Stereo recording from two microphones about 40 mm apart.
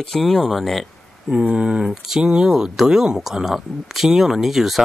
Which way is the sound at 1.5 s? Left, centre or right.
Right.